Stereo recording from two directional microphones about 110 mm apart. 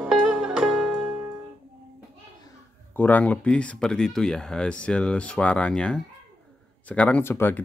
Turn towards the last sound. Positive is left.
turn(degrees=20)  # may be behind; listen again after turning